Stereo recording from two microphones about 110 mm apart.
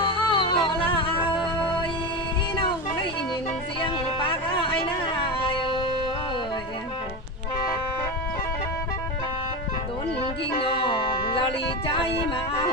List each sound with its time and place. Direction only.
0.0 s music: 50° left (ahead or behind)
4.5 s music: 50° left (ahead or behind)
10.6 s music: 50° left (ahead or behind)
11.9 s a sound: 50° left (ahead or behind)